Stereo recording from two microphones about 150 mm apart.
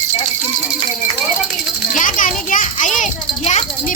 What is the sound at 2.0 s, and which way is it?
Children playing, 65° left (ahead or behind).